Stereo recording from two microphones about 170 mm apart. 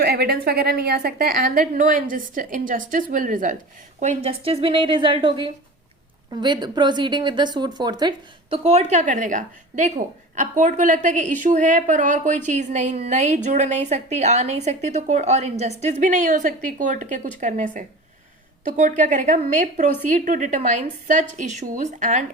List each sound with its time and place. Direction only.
0.0 s a woman's voice: 70° right (ahead or behind); by 3.6 s 50° right (ahead or behind)
4.0 s a woman's voice: 40° right (ahead or behind)